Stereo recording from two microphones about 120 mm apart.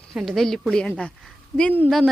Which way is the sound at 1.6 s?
15° left (ahead or behind).